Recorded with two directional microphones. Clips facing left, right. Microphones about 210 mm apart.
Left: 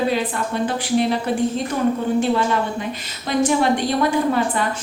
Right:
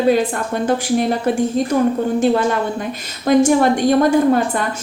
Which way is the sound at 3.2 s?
45° right (ahead or behind).